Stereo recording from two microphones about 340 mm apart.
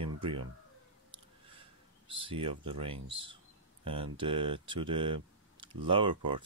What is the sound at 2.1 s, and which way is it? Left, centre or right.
Speech, centre.